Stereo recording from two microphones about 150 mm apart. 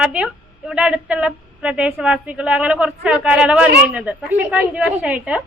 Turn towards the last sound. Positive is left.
turn(degrees=-5)  # may be behind; listen again after turning